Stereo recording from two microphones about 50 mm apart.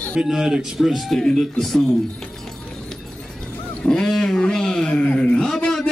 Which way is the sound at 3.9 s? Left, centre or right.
Centre.